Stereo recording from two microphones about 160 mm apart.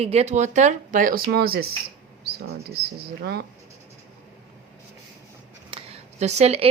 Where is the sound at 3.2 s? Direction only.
90° right.